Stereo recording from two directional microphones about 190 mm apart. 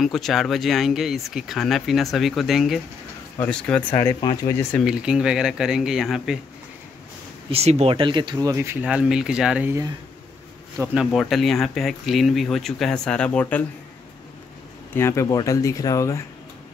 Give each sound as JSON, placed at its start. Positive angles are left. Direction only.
{"t": 0.0, "sound": "speech", "side_deg": 0}
{"t": 3.9, "sound": "speech", "side_deg": 15}
{"t": 4.7, "sound": "speech", "side_deg": -5}
{"t": 7.5, "sound": "speech", "side_deg": -35}
{"t": 10.8, "sound": "speech", "side_deg": 0}
{"t": 15.0, "sound": "speech", "side_deg": 15}